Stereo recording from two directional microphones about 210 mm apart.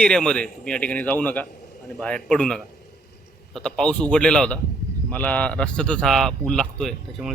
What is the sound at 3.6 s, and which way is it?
Speech, 5° left (ahead or behind).